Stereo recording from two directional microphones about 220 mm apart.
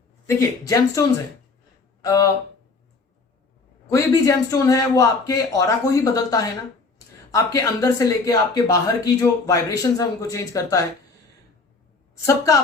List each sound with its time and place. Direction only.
0.3 s a man's voice: 15° left (ahead or behind)
3.8 s a man's voice: 15° left (ahead or behind)
12.2 s a man's voice: 15° left (ahead or behind)